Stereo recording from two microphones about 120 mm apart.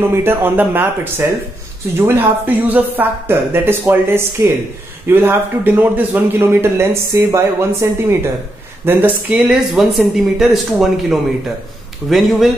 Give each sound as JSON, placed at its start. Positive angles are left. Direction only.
{"t": 0.0, "sound": "speech", "side_deg": -20}